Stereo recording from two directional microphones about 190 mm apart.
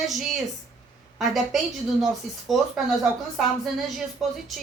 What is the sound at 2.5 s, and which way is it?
Speech, centre (ahead or behind).